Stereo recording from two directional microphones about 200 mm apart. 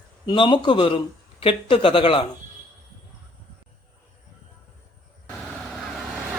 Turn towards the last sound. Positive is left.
turn(degrees=-5)  # may be behind; listen again after turning